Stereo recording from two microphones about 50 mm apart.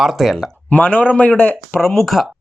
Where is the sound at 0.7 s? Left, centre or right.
Left.